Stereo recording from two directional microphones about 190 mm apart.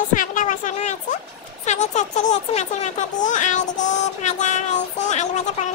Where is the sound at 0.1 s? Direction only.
45° left (ahead or behind).